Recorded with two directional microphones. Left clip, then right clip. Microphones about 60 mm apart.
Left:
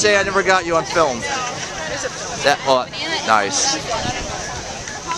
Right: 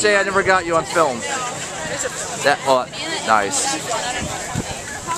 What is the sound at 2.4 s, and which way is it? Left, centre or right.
Speech, centre.